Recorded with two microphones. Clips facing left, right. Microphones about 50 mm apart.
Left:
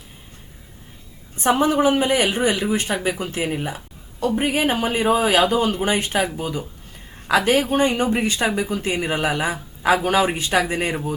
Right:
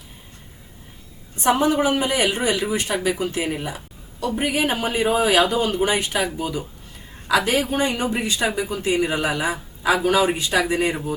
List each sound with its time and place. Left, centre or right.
1.5 s speech: left
4.4 s speech: left